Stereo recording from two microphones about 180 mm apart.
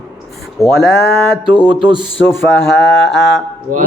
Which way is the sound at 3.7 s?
50° right (ahead or behind).